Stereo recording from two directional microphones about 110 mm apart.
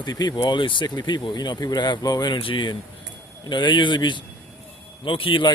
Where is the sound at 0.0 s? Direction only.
40° left (ahead or behind).